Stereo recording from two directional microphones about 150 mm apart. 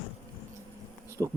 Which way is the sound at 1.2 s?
15° right (ahead or behind).